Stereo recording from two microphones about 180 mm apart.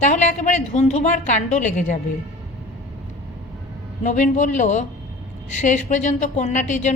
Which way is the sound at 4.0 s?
45° left (ahead or behind).